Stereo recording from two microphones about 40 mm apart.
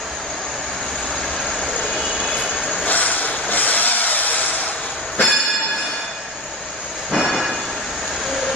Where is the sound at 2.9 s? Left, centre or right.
Left.